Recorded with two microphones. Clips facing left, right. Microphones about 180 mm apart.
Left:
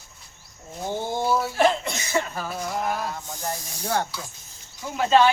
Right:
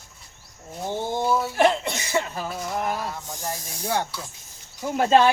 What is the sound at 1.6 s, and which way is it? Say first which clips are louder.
Cough: right 2 dB; 20° right (ahead or behind).